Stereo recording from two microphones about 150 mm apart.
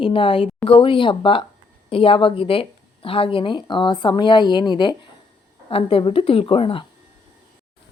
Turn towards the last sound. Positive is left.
turn(degrees=40)  # may be behind; listen again after turning